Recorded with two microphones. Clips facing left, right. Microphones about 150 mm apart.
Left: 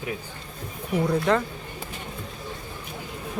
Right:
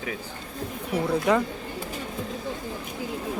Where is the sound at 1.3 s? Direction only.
10° right (ahead or behind).